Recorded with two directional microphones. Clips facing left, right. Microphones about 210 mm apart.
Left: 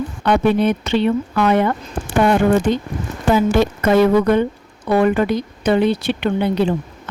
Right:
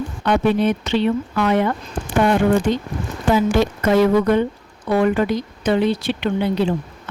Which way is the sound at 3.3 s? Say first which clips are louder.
Left 2 dB; 55° left (ahead or behind).